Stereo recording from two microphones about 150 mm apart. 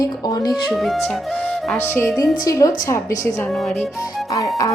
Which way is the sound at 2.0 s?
20° left (ahead or behind).